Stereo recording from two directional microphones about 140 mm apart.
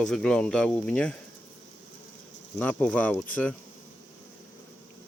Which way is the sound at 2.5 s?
10° left (ahead or behind).